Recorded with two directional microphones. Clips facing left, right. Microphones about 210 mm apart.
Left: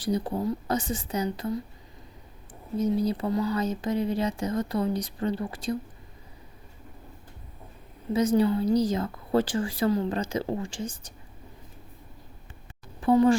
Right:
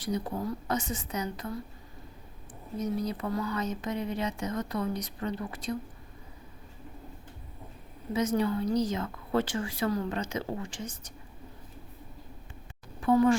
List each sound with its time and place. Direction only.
0.0 s a woman's voice: 30° left (ahead or behind)
2.7 s a woman's voice: 30° left (ahead or behind)
8.1 s a woman's voice: 35° left (ahead or behind)
13.0 s a woman's voice: 30° left (ahead or behind)